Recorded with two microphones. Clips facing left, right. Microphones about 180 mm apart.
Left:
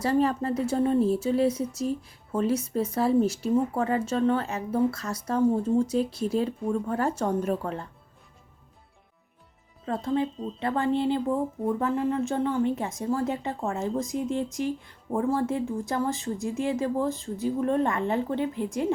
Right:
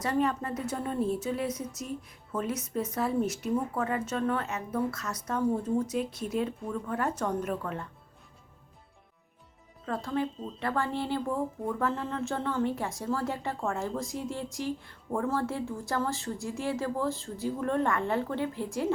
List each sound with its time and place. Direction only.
0.0 s a woman's voice: 30° left (ahead or behind)
9.8 s a woman's voice: 25° left (ahead or behind)